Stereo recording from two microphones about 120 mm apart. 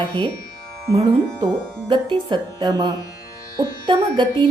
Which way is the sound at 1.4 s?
40° right (ahead or behind).